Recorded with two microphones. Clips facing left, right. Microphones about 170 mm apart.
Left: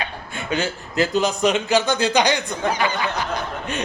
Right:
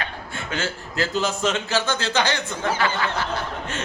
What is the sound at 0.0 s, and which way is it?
A man's voice, 15° left (ahead or behind).